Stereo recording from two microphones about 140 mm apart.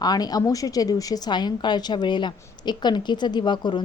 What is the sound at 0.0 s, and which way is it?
A woman's voice, 30° left (ahead or behind).